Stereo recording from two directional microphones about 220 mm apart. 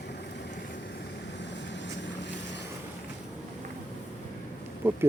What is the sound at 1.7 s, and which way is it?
Vehicle, 55° left (ahead or behind).